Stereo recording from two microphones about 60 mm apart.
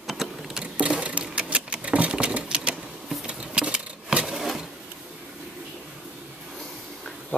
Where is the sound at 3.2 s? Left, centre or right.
Centre.